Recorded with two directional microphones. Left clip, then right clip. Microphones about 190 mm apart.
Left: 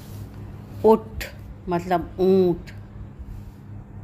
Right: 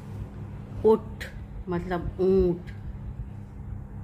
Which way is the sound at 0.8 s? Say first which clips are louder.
Left 4 dB; 35° left (ahead or behind).